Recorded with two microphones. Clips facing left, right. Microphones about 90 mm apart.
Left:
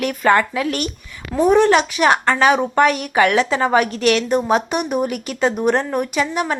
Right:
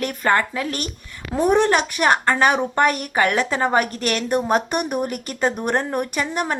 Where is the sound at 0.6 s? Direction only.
35° right (ahead or behind).